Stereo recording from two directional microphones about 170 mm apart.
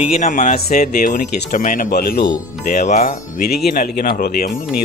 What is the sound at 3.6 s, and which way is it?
Speech, 60° left (ahead or behind).